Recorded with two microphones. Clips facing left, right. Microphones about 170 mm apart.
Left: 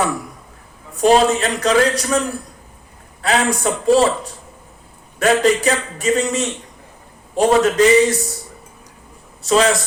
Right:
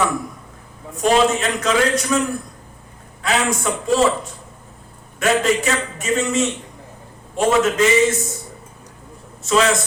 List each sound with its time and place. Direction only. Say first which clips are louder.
1.0 s a man's voice: left 3 dB; 35° left (ahead or behind)
3.2 s a man's voice: left 2 dB; 35° left (ahead or behind)
9.4 s speech: left 2 dB; 35° left (ahead or behind)